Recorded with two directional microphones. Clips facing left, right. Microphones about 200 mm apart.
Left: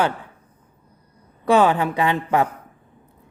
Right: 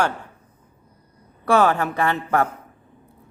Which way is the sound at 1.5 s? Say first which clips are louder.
Left 2 dB; 15° left (ahead or behind).